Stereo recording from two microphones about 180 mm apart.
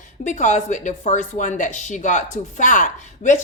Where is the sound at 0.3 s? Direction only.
45° left (ahead or behind).